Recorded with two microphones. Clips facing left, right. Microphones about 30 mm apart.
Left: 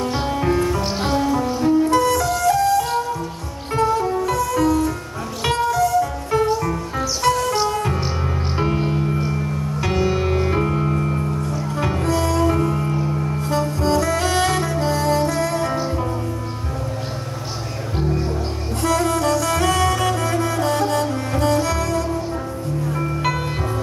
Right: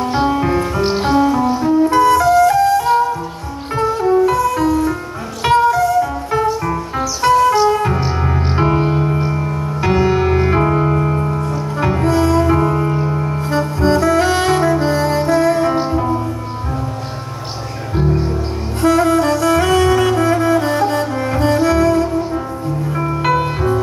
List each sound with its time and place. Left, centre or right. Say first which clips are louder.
0.3 s music: right 3 dB; centre
10.6 s music: right 6 dB; right
11.4 s music: right 4 dB; centre
12.6 s music: right 5 dB; right
13.4 s saxophone: right 4 dB; centre
15.9 s music: right 7 dB; centre
18.8 s saxophone: right 7 dB; centre
21.5 s music: right 8 dB; centre